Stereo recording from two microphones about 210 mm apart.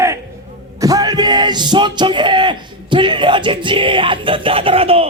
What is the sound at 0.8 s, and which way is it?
Speech, 15° right (ahead or behind).